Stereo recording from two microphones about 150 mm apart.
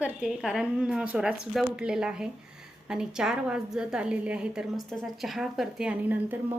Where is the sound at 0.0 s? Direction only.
5° right (ahead or behind).